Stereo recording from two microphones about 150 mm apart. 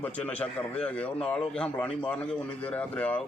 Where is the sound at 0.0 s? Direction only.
10° left (ahead or behind).